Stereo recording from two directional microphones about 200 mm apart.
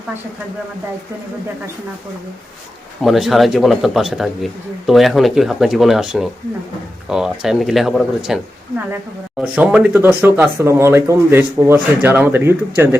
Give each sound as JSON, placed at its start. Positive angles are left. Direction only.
{"t": 3.0, "sound": "speech", "side_deg": 0}
{"t": 9.4, "sound": "speech", "side_deg": -5}